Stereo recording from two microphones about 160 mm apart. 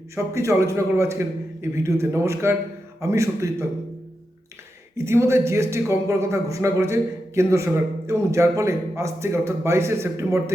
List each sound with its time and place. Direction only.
0.3 s speech: 20° right (ahead or behind)
4.9 s speech: 15° right (ahead or behind)